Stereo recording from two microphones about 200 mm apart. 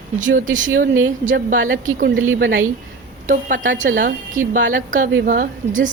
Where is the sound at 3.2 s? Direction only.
40° right (ahead or behind).